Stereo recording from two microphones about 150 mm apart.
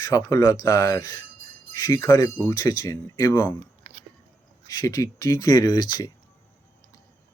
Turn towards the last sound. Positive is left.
turn(degrees=25)  # may be behind; listen again after turning